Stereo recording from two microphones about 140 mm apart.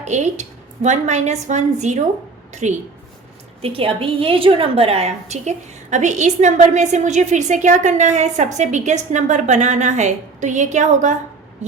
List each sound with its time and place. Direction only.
0.0 s a woman's voice: 55° right (ahead or behind)
3.6 s a woman's voice: 40° right (ahead or behind); by 11.2 s 60° right (ahead or behind)